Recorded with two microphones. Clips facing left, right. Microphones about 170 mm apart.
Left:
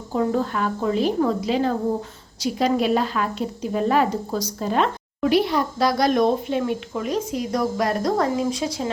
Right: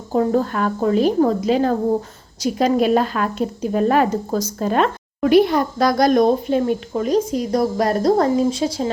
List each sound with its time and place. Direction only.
0.1 s speech: 40° right (ahead or behind)